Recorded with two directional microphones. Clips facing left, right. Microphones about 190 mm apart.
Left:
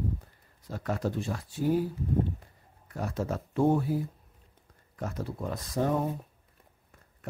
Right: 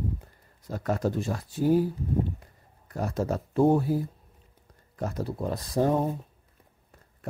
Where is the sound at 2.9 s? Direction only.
40° right (ahead or behind).